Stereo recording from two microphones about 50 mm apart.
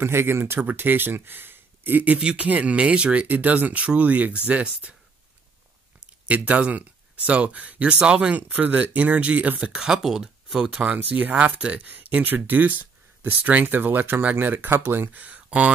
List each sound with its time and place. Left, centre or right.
0.0 s speech: right
0.6 s speech: right
2.1 s speech: right
6.2 s speech: right
9.8 s speech: centre
11.0 s speech: right
14.7 s speech: right
15.1 s speech: right